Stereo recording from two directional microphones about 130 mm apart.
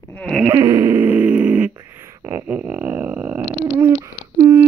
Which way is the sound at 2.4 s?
10° right (ahead or behind).